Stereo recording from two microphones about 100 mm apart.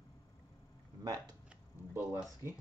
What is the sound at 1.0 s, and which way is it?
Speech, 40° right (ahead or behind).